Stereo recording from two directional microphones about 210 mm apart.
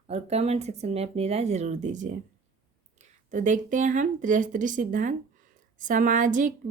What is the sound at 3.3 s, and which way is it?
A woman's voice, 35° right (ahead or behind).